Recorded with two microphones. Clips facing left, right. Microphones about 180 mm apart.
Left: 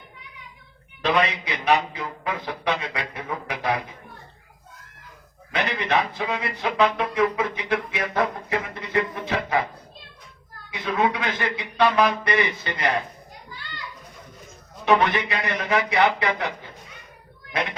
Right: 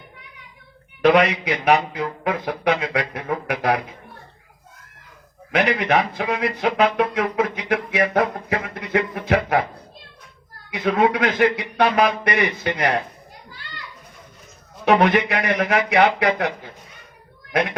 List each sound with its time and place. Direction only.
1.0 s speech: 65° right (ahead or behind)
5.5 s speech: 70° right (ahead or behind)
10.8 s speech: 75° right (ahead or behind)
14.8 s speech: 65° right (ahead or behind)